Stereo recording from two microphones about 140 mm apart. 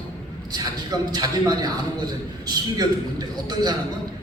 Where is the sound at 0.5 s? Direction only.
30° right (ahead or behind).